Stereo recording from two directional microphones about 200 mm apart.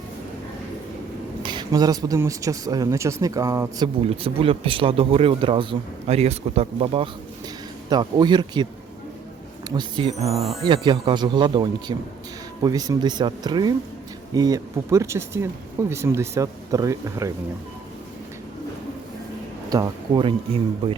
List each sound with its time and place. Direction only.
1.4 s speech: 25° right (ahead or behind)
4.0 s speech: 30° right (ahead or behind)
9.6 s speech: 20° right (ahead or behind)
19.7 s speech: 20° right (ahead or behind)